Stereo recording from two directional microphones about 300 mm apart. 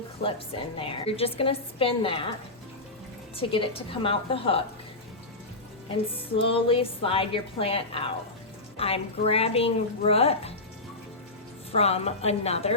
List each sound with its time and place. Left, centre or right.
0.2 s a woman's voice: centre
3.3 s a woman's voice: centre
6.3 s a woman's voice: centre
11.7 s speech: centre